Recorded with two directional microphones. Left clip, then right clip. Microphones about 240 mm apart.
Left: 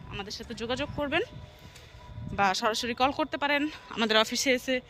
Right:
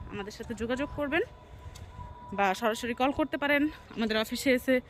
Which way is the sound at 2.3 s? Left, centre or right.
Centre.